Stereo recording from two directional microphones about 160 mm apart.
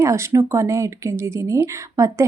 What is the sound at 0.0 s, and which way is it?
Speech, 20° right (ahead or behind).